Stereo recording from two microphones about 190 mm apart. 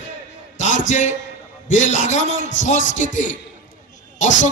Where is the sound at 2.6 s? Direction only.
40° left (ahead or behind).